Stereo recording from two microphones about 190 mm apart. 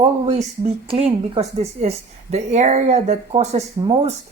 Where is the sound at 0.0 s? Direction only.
30° right (ahead or behind).